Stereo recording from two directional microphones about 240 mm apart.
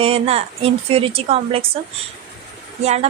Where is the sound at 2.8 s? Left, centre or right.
Right.